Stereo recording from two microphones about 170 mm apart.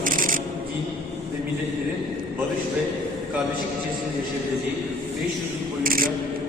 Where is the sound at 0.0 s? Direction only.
55° right (ahead or behind).